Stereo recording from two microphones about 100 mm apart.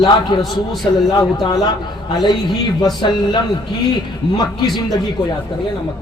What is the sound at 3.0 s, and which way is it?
Speech, 50° left (ahead or behind).